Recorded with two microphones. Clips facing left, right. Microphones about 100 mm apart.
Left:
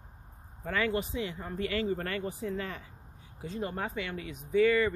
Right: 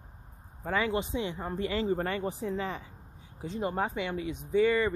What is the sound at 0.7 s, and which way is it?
Speech, 20° right (ahead or behind).